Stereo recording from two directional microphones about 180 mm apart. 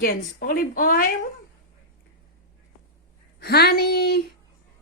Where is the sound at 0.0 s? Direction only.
55° left (ahead or behind).